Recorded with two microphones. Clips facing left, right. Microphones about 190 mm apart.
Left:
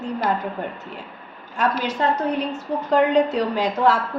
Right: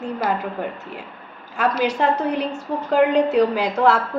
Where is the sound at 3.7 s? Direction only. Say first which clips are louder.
Left 1 dB; 75° right (ahead or behind).